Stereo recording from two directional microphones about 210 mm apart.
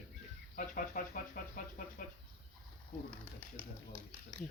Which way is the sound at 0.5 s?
40° left (ahead or behind).